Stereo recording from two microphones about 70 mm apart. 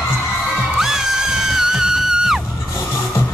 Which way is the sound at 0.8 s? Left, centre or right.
Centre.